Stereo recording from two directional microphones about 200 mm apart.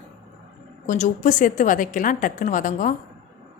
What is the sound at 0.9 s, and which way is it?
A woman's voice, 40° left (ahead or behind).